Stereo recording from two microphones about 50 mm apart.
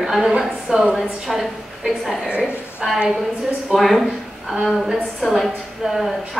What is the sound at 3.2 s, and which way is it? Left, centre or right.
A woman's voice, centre.